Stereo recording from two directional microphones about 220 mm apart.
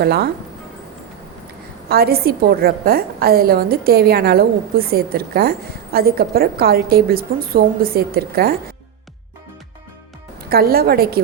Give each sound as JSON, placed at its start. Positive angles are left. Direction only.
{"t": 0.0, "sound": "a woman's voice", "side_deg": -45}
{"t": 1.9, "sound": "a woman's voice", "side_deg": -45}
{"t": 10.5, "sound": "a woman's voice", "side_deg": -45}